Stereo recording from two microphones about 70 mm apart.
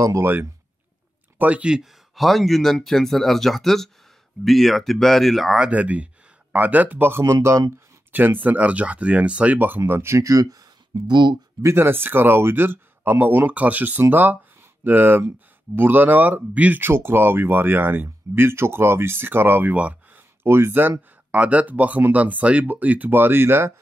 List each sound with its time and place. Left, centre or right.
0.0 s speech: right
1.4 s speech: centre
1.8 s speech: centre
5.6 s speech: centre
9.8 s speech: right
10.2 s speech: right
11.6 s speech: right
20.4 s speech: right
21.3 s speech: centre; by 23.7 s right